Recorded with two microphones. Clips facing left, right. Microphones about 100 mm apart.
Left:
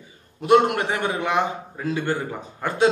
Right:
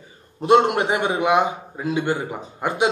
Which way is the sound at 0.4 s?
25° right (ahead or behind).